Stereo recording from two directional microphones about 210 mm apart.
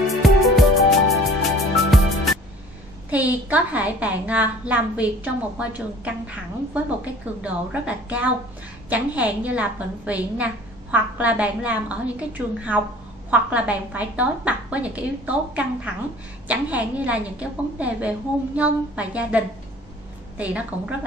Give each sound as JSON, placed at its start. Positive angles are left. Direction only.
{"t": 0.1, "sound": "music", "side_deg": 0}
{"t": 3.1, "sound": "a woman's voice", "side_deg": -5}